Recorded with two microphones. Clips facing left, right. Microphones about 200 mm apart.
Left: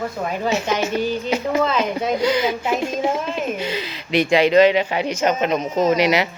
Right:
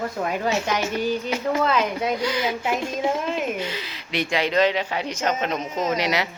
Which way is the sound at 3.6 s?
90° left.